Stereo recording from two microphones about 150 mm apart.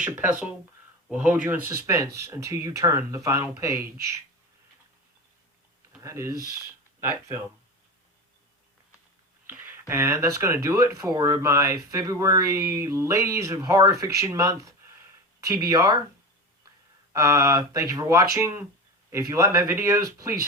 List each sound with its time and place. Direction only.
0.0 s speech: 10° right (ahead or behind)
6.0 s speech: 20° right (ahead or behind)
9.5 s speech: 15° right (ahead or behind)
17.1 s speech: 20° right (ahead or behind)